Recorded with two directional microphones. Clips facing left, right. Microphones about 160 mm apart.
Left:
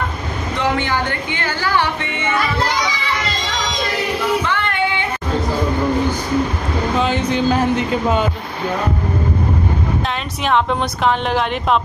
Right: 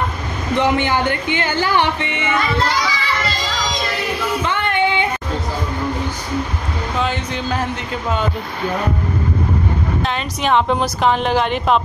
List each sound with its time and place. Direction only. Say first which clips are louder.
0.6 s speech: right 3 dB; 15° right (ahead or behind)
4.5 s female singing: right 2 dB; 20° right (ahead or behind)
7.0 s a woman's voice: left 4 dB; centre (ahead or behind)
10.0 s a woman's voice: right 1 dB; centre (ahead or behind)